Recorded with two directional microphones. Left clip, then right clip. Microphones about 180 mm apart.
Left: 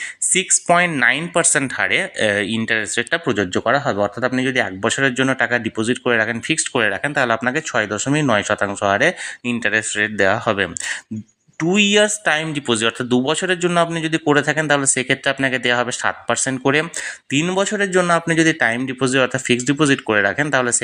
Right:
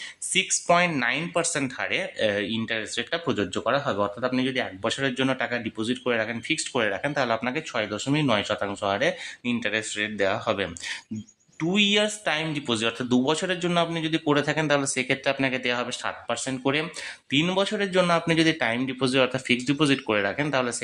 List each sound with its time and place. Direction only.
0.3 s speech: 25° left (ahead or behind)
17.3 s speech: 20° left (ahead or behind)